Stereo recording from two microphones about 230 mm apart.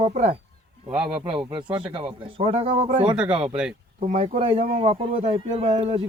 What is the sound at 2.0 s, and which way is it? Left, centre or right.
Speech, right.